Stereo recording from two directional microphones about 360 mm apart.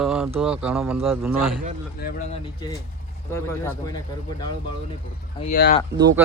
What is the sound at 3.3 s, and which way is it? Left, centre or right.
Speech, centre.